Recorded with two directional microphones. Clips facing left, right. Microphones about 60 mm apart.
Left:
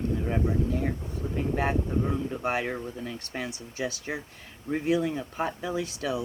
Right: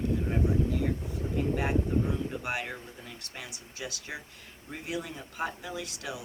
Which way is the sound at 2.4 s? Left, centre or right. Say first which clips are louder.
Left 6 dB; left.